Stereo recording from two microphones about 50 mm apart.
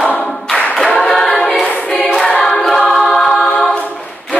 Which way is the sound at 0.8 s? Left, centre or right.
Centre.